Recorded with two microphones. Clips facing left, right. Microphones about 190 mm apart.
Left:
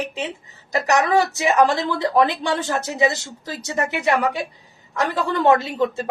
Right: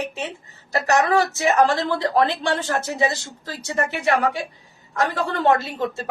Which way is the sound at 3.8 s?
20° left (ahead or behind).